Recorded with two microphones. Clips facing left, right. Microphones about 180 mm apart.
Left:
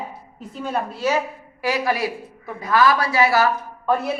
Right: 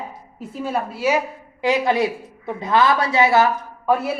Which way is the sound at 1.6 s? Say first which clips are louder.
Right 4 dB; 20° right (ahead or behind).